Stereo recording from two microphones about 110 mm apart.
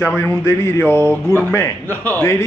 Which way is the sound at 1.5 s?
15° left (ahead or behind).